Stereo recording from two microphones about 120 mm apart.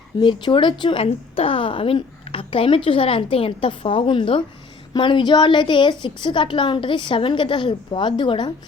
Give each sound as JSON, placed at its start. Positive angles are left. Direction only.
{"t": 0.2, "sound": "a woman's voice", "side_deg": 45}